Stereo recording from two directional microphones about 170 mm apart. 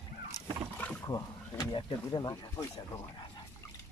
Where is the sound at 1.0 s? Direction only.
25° left (ahead or behind).